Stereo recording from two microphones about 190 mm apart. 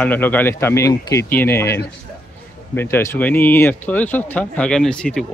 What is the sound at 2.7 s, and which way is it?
Speech, 10° left (ahead or behind).